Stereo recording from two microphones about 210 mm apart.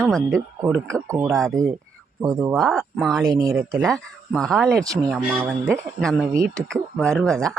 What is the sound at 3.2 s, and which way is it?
Speech, 15° right (ahead or behind).